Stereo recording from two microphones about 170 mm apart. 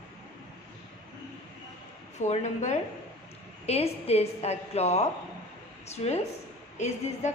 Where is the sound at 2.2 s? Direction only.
40° left (ahead or behind).